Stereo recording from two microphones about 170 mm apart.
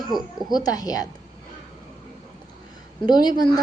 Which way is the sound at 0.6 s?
20° left (ahead or behind).